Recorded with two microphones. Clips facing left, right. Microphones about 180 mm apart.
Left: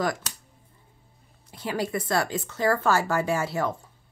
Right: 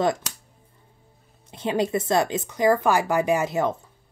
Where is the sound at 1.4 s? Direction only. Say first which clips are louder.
Right 5 dB; 20° right (ahead or behind).